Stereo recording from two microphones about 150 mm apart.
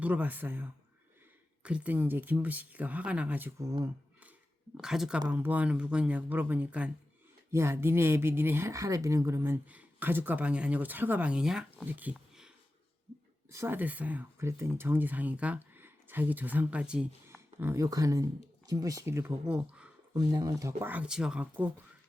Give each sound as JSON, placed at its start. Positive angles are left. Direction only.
{"t": 0.0, "sound": "speech", "side_deg": -10}
{"t": 4.8, "sound": "speech", "side_deg": -5}
{"t": 13.5, "sound": "speech", "side_deg": -15}
{"t": 20.1, "sound": "speech", "side_deg": -25}